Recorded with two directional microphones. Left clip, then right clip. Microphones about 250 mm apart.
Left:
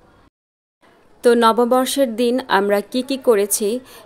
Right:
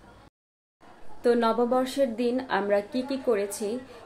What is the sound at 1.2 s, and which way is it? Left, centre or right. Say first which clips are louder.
A woman's voice: left 10 dB; left.